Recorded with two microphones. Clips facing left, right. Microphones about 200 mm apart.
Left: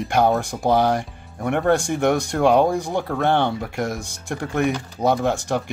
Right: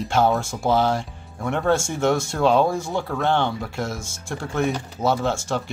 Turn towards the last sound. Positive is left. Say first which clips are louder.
# left 2 dB
turn(degrees=15)  # may be behind; listen again after turning